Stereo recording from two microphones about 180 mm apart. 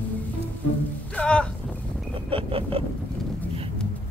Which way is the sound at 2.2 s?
30° right (ahead or behind).